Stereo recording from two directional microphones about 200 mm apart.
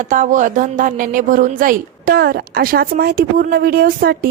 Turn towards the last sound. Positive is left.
turn(degrees=-45)  # may be behind; listen again after turning